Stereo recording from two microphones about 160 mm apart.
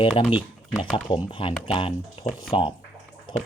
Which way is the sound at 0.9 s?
35° left (ahead or behind).